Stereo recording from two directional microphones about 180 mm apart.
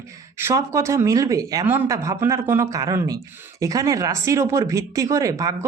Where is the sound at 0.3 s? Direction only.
15° right (ahead or behind).